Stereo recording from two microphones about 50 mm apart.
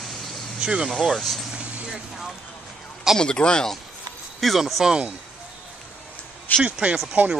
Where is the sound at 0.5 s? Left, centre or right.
Centre.